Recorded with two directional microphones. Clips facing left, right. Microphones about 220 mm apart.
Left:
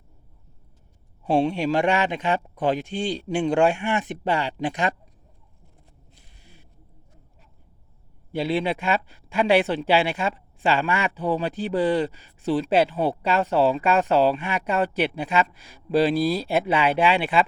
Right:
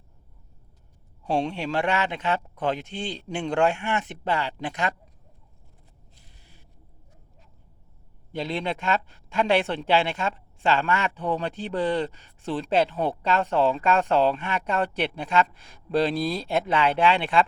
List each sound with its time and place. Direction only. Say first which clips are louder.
1.3 s speech: left 5 dB; 10° left (ahead or behind)
8.3 s speech: left 5 dB; 10° left (ahead or behind)